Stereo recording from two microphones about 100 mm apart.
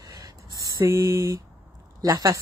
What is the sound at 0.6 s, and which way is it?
Speech, 35° right (ahead or behind).